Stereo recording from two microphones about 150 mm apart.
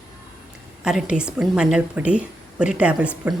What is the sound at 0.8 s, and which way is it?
A woman's voice, 5° right (ahead or behind).